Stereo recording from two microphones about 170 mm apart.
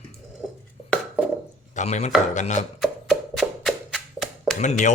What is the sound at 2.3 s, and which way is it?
Speech, 45° left (ahead or behind).